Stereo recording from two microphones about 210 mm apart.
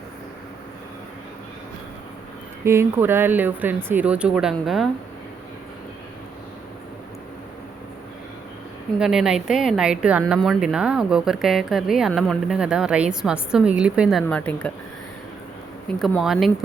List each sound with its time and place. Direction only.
2.6 s speech: 10° right (ahead or behind)
9.0 s speech: 5° right (ahead or behind)
16.0 s speech: centre (ahead or behind)